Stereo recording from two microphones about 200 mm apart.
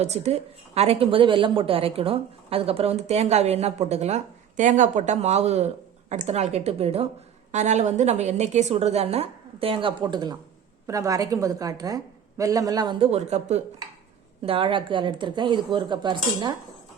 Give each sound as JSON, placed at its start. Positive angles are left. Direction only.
{"t": 0.0, "sound": "a woman's voice", "side_deg": -30}